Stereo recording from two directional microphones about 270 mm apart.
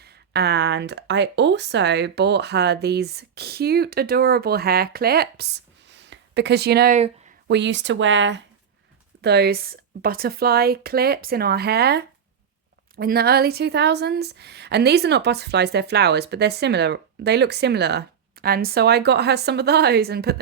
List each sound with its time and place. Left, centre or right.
0.0 s a woman's voice: right
7.4 s a woman's voice: right